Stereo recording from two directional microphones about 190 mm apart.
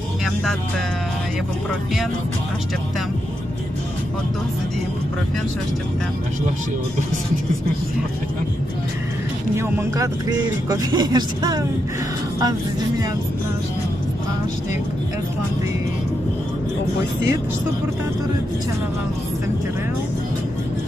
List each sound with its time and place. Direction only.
9.6 s speech: 15° right (ahead or behind)